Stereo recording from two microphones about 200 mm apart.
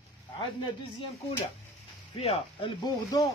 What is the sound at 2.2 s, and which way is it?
Speech, 30° left (ahead or behind).